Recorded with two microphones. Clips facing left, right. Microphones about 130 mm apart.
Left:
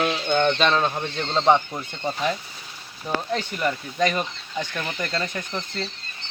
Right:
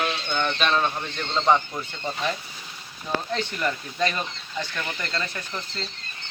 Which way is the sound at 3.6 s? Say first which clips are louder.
Left 4 dB; 10° left (ahead or behind).